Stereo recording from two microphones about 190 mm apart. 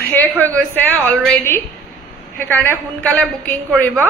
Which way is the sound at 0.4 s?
10° left (ahead or behind).